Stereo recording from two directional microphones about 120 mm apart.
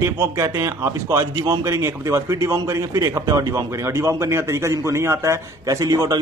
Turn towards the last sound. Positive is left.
turn(degrees=-30)  # may be behind; listen again after turning